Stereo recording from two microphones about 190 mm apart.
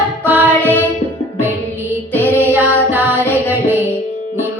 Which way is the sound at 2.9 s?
10° right (ahead or behind).